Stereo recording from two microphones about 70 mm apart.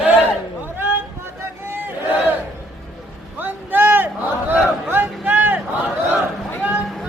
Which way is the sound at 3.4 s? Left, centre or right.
Right.